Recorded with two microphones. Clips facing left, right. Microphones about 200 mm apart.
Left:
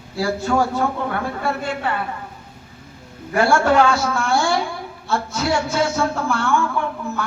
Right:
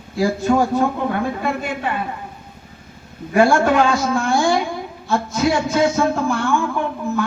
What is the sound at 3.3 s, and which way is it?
A man's voice, 15° right (ahead or behind).